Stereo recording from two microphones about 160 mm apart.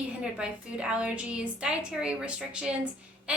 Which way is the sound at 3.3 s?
5° right (ahead or behind).